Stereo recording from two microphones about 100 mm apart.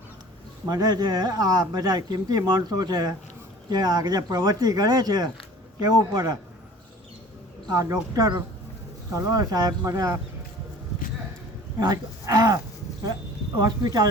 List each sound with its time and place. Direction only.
0.7 s a man's voice: 40° right (ahead or behind)
7.7 s speech: 35° right (ahead or behind)
11.8 s speech: 40° right (ahead or behind)
13.6 s a man's voice: 40° right (ahead or behind)